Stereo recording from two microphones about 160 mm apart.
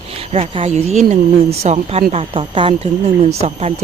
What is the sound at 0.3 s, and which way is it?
Speech, 40° right (ahead or behind).